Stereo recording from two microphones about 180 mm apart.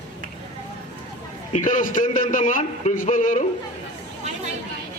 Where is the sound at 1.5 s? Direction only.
45° left (ahead or behind).